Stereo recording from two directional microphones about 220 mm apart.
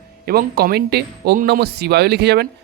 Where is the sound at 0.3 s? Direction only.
45° right (ahead or behind).